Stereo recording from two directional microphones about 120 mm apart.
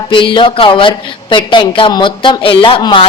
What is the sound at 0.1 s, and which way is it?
A man's voice, 45° left (ahead or behind).